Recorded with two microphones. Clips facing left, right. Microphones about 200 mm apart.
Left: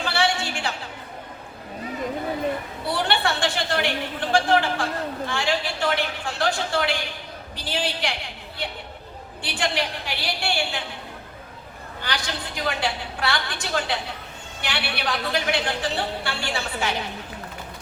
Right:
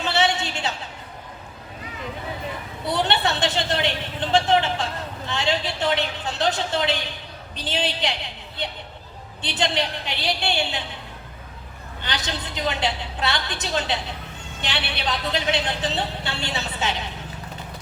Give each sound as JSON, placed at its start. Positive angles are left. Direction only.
{"t": 0.0, "sound": "a sound", "side_deg": -20}
{"t": 2.8, "sound": "a woman's voice", "side_deg": -20}
{"t": 12.0, "sound": "a woman's voice", "side_deg": -20}